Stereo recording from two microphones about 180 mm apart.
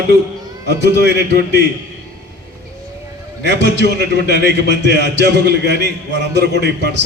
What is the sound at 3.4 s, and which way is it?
A man's voice, 70° right (ahead or behind).